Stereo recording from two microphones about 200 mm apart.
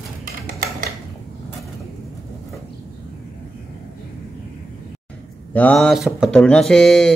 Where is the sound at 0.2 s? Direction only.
45° right (ahead or behind).